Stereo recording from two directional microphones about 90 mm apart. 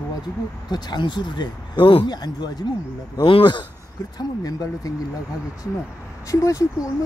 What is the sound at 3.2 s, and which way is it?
Speech, 70° left (ahead or behind).